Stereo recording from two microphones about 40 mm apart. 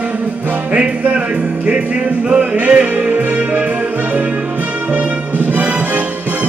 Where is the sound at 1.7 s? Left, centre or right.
Right.